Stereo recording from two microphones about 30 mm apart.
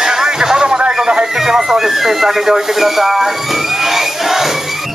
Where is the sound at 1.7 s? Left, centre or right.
Centre.